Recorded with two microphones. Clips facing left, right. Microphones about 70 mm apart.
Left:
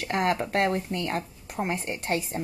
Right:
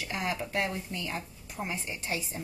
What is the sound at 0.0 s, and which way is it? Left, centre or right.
Speech, left.